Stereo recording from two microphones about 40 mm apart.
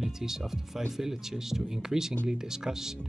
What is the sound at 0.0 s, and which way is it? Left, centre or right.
Speech, centre.